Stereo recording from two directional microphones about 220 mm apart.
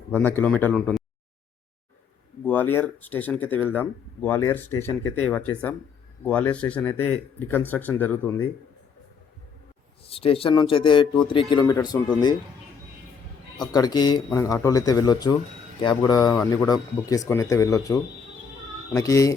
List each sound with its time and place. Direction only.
0.1 s speech: 10° left (ahead or behind)
2.4 s speech: 10° left (ahead or behind)
10.1 s speech: 25° left (ahead or behind)
13.6 s speech: 20° left (ahead or behind)